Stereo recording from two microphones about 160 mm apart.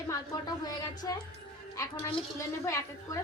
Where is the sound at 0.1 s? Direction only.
25° left (ahead or behind).